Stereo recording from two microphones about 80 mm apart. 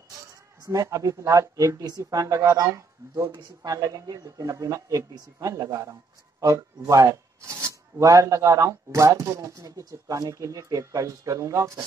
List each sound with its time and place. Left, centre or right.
0.7 s speech: right
1.8 s a woman's voice: right
2.0 s a man's voice: right